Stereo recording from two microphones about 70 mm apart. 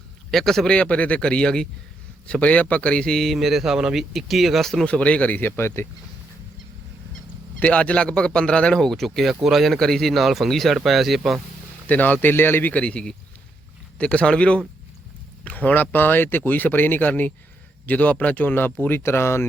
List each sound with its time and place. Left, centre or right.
0.3 s a man's voice: centre
3.3 s speech: centre
4.9 s speech: centre; by 5.9 s left
7.6 s a man's voice: centre
11.9 s a man's voice: left